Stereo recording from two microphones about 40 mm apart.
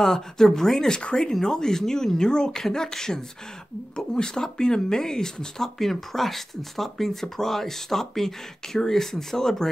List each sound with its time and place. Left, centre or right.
0.0 s speech: centre